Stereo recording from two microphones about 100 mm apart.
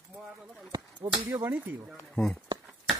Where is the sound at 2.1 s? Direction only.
10° left (ahead or behind).